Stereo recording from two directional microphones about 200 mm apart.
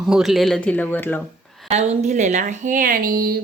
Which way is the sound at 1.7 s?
35° right (ahead or behind).